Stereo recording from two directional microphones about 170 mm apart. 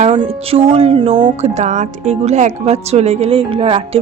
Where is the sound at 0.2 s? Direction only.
30° right (ahead or behind).